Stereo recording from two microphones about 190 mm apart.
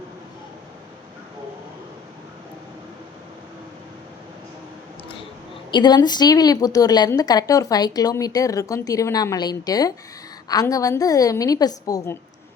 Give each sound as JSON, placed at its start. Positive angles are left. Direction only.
{"t": 5.7, "sound": "a woman's voice", "side_deg": 20}